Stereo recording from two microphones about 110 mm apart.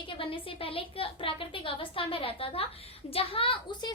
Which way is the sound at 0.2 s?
55° left (ahead or behind).